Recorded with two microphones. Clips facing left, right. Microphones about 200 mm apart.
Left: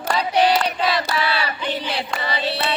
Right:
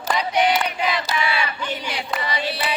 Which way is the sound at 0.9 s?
35° left (ahead or behind).